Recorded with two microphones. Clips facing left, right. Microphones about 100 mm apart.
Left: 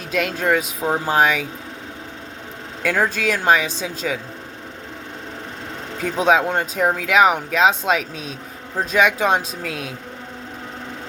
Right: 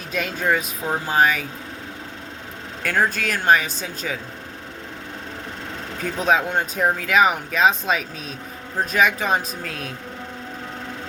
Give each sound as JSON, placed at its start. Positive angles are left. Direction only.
{"t": 0.3, "sound": "speech", "side_deg": 90}
{"t": 2.8, "sound": "speech", "side_deg": 90}
{"t": 6.0, "sound": "speech", "side_deg": 90}